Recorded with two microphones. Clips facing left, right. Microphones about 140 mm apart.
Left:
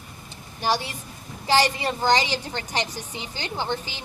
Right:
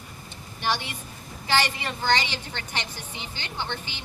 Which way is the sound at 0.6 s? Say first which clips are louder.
Left 3 dB; 40° left (ahead or behind).